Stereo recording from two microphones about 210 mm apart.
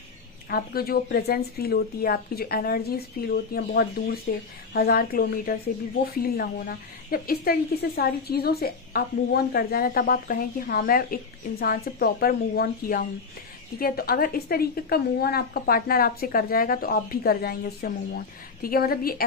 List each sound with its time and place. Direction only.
0.5 s a woman's voice: 45° left (ahead or behind)